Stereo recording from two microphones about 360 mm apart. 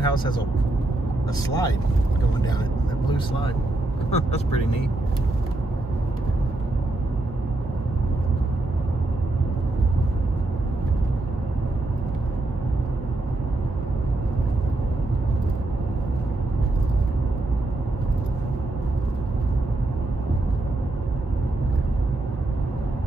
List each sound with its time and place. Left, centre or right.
0.0 s speech: centre
1.5 s speech: centre
3.1 s speech: centre